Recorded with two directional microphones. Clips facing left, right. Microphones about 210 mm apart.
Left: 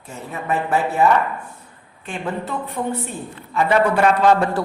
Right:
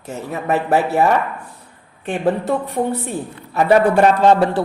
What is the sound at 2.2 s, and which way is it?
A woman's voice, 35° right (ahead or behind).